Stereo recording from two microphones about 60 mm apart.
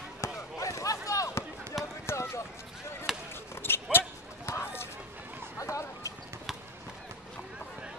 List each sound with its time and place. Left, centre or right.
0.2 s basketball bounce: left
1.7 s basketball bounce: centre
2.0 s run: left
3.1 s basketball bounce: centre
3.6 s dog: left
4.5 s a sound: left
5.6 s a sound: left